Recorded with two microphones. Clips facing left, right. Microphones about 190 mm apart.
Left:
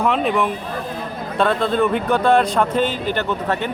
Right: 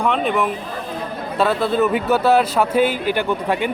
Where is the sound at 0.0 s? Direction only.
Centre (ahead or behind).